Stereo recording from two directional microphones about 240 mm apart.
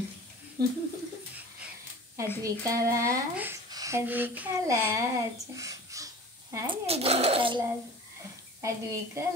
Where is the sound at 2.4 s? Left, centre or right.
Centre.